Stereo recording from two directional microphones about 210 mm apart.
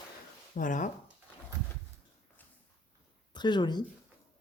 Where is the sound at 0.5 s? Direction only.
40° left (ahead or behind).